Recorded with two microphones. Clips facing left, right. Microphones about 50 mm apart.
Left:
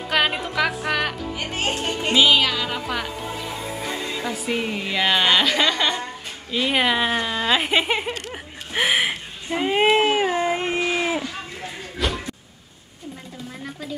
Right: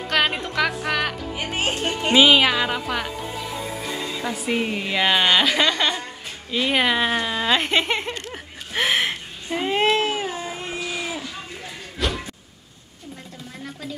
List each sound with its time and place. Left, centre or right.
0.1 s a woman's voice: centre
1.9 s music: centre
2.7 s a woman's voice: centre
4.2 s a woman's voice: centre
10.0 s a sound: left
12.0 s a sound: centre